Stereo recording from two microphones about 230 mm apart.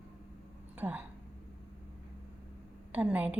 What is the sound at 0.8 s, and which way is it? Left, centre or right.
Speech, centre.